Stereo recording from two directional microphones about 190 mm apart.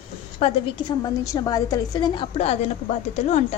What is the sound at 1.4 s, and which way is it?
Speech, 20° left (ahead or behind).